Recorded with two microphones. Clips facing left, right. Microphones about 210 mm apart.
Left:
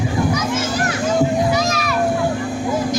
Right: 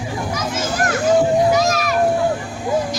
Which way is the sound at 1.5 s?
45° right (ahead or behind).